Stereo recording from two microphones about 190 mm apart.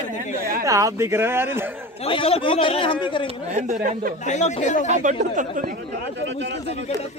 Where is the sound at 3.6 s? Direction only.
40° right (ahead or behind).